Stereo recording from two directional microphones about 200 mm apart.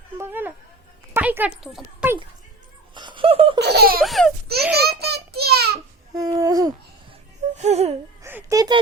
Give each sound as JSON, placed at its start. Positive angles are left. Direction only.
{"t": 0.2, "sound": "a sound", "side_deg": -10}
{"t": 1.5, "sound": "a child's voice", "side_deg": 0}
{"t": 2.9, "sound": "laughter", "side_deg": -25}
{"t": 3.6, "sound": "laughter", "side_deg": -55}
{"t": 4.0, "sound": "a child's voice", "side_deg": 0}
{"t": 4.8, "sound": "child singing", "side_deg": -55}
{"t": 6.1, "sound": "a sound", "side_deg": -15}
{"t": 7.5, "sound": "music", "side_deg": -35}
{"t": 8.2, "sound": "a sound", "side_deg": -10}